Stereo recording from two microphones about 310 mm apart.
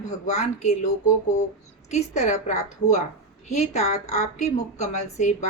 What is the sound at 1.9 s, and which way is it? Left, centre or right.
A woman's voice, left.